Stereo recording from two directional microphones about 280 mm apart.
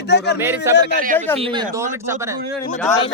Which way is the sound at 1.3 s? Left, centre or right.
Centre.